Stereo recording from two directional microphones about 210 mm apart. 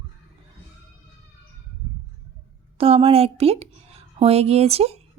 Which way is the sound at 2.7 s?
25° right (ahead or behind).